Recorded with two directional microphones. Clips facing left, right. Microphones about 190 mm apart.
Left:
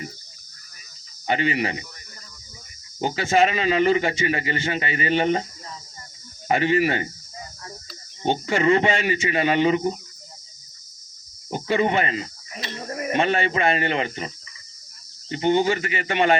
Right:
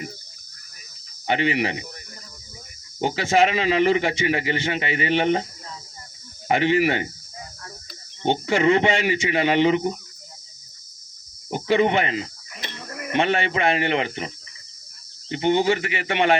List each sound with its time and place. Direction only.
1.3 s speech: 20° right (ahead or behind)
3.0 s speech: 15° right (ahead or behind)
6.5 s speech: 20° right (ahead or behind)
8.3 s speech: 20° right (ahead or behind)
11.5 s speech: 20° right (ahead or behind)
12.7 s a sound: 40° left (ahead or behind)
13.1 s speech: 20° right (ahead or behind)